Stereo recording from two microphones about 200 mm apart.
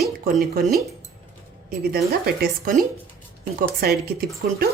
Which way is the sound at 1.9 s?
50° right (ahead or behind).